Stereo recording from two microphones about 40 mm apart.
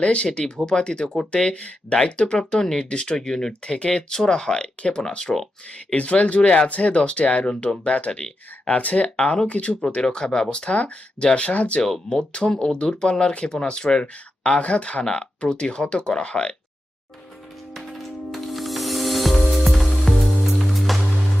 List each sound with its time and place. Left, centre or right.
0.0 s speech: left
1.0 s speech: centre
1.5 s speech: left
3.2 s speech: centre
5.9 s speech: left
12.0 s speech: left
14.0 s speech: left
17.7 s music: centre